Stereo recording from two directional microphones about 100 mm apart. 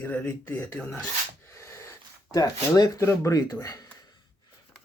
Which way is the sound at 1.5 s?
30° left (ahead or behind).